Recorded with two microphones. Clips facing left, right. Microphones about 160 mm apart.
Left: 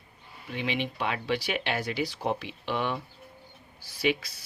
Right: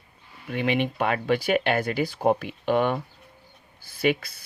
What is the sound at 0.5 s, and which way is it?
Speech, 55° right (ahead or behind).